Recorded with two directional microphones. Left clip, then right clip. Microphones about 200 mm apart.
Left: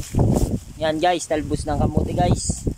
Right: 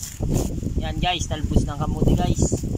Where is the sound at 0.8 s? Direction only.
35° left (ahead or behind).